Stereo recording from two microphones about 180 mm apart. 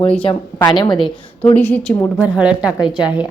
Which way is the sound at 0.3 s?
25° left (ahead or behind).